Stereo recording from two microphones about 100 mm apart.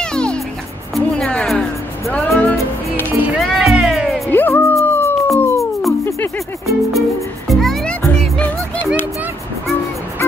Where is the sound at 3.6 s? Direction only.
10° right (ahead or behind).